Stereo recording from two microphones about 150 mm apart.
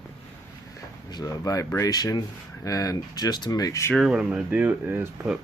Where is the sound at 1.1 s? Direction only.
25° left (ahead or behind).